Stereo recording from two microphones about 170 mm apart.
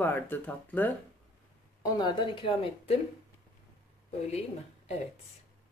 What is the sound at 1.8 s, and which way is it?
Speech, 25° left (ahead or behind).